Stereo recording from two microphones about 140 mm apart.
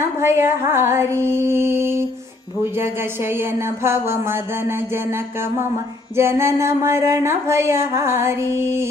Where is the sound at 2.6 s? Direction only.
15° right (ahead or behind).